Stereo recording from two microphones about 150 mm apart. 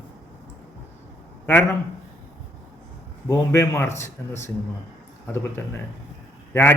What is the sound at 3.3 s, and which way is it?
A man's voice, 20° left (ahead or behind).